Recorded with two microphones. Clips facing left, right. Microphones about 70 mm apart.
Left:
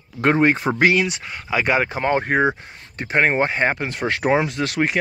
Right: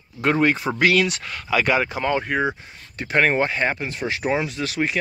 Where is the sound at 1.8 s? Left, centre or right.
Left.